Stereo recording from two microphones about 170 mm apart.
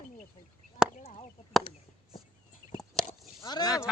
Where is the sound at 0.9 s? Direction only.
45° left (ahead or behind).